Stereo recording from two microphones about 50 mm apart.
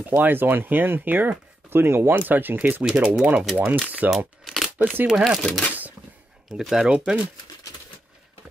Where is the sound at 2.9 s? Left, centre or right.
Right.